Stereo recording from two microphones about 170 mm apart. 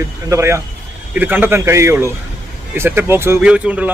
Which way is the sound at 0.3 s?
15° right (ahead or behind).